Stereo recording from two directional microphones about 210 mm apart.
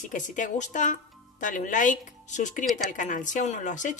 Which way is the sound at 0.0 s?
35° left (ahead or behind).